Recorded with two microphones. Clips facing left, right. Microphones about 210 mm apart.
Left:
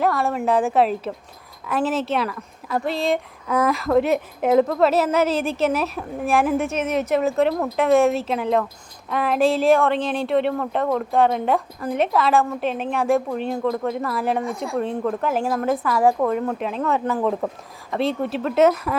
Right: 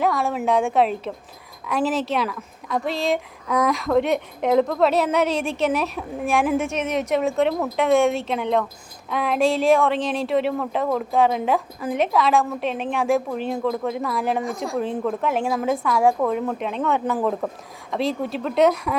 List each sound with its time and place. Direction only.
0.0 s speech: centre (ahead or behind)